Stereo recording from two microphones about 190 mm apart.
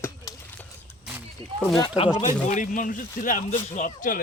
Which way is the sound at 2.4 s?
40° left (ahead or behind).